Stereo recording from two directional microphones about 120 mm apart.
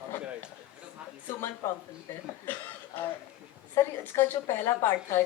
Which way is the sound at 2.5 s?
15° left (ahead or behind).